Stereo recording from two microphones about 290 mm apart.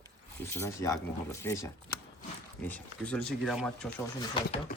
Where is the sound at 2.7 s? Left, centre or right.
Centre.